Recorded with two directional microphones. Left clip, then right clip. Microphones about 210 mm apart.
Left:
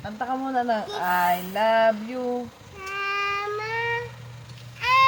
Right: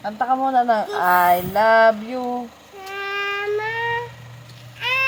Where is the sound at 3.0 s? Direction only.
10° left (ahead or behind).